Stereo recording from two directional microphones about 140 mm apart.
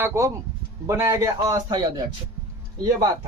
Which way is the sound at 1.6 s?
30° right (ahead or behind).